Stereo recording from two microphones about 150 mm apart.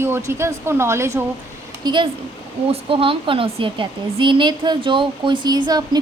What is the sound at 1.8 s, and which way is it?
A woman's voice, 30° right (ahead or behind).